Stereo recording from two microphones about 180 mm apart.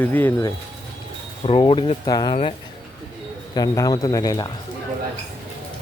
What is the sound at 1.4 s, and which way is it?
Speech, 30° left (ahead or behind).